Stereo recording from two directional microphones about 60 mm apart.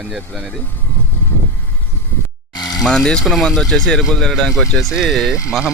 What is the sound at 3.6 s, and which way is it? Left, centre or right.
Speech, centre.